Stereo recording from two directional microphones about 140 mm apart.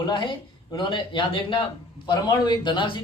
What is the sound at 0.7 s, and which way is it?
Speech, 35° left (ahead or behind).